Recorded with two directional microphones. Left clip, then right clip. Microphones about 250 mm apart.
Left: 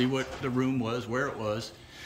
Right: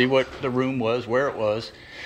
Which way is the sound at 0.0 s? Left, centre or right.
Centre.